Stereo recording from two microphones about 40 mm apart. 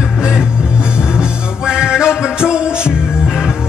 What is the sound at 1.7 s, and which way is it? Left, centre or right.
Music, right.